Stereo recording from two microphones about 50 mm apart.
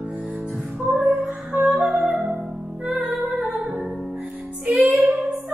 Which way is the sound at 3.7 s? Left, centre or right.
Centre.